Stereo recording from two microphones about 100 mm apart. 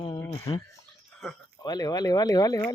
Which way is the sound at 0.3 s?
55° left (ahead or behind).